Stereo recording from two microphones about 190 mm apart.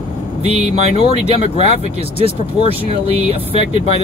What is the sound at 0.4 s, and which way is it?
Speech, 30° right (ahead or behind).